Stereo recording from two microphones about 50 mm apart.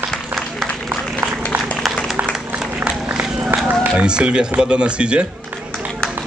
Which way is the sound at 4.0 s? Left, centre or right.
Right.